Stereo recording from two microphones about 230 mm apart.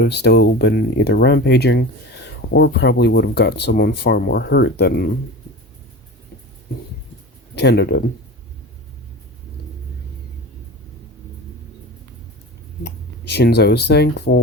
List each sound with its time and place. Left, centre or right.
0.0 s speech: left
7.5 s speech: left
12.8 s speech: left